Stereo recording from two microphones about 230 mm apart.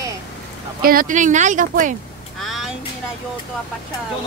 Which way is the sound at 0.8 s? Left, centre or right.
Right.